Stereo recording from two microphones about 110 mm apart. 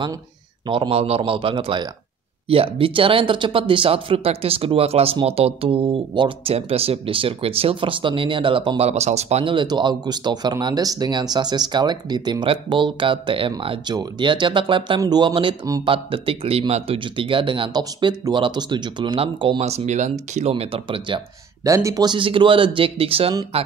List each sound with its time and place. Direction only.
0.7 s speech: 60° right (ahead or behind); by 9.4 s 75° right (ahead or behind)
9.4 s speech: 50° right (ahead or behind)
19.6 s speech: 80° right; by 21.2 s 55° right (ahead or behind)
21.6 s speech: 30° right (ahead or behind); by 23.7 s 65° right (ahead or behind)